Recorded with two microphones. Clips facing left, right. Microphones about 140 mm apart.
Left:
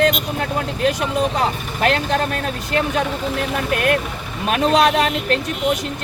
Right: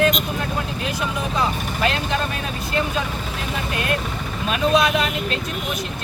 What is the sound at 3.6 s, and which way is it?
Speech, 60° left (ahead or behind).